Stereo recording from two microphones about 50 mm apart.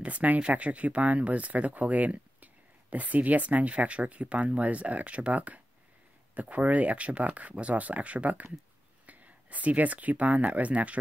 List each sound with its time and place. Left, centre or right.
0.0 s speech: right